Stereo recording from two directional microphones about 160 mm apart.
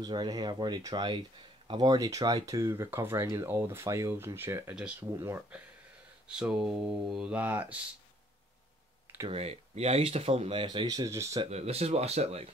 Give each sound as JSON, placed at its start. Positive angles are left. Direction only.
{"t": 0.0, "sound": "speech", "side_deg": -25}
{"t": 9.3, "sound": "speech", "side_deg": -40}
{"t": 11.5, "sound": "speech", "side_deg": -40}